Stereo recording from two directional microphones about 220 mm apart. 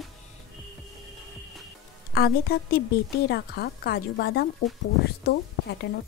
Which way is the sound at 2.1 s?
45° left (ahead or behind).